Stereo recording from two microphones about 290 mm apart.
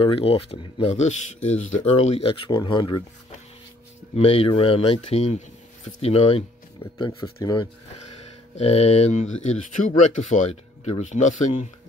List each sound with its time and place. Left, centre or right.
0.0 s speech: centre
4.1 s speech: left